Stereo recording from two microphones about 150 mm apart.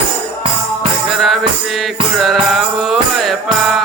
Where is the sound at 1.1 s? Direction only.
Centre (ahead or behind).